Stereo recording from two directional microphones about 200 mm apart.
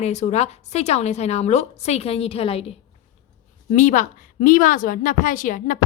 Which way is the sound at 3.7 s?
40° left (ahead or behind).